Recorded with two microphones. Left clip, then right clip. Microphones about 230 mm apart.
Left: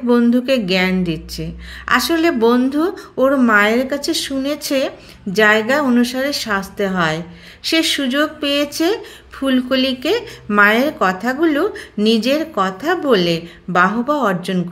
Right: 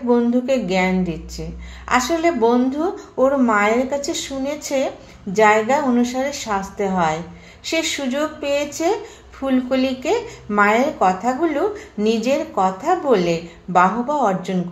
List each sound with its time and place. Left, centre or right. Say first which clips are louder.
0.1 s a woman's voice: left 2 dB; left